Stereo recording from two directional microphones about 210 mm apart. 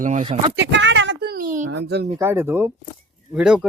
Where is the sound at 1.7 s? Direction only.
55° right (ahead or behind).